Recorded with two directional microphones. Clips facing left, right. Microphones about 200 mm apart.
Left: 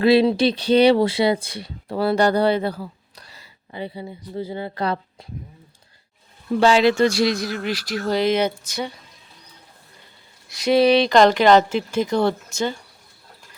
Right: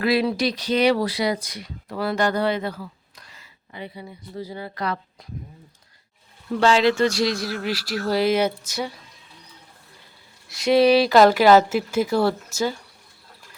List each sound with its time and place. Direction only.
0.0 s speech: 25° left (ahead or behind)
6.6 s speech: 10° left (ahead or behind)
7.4 s speech: 5° right (ahead or behind)
10.5 s speech: centre (ahead or behind)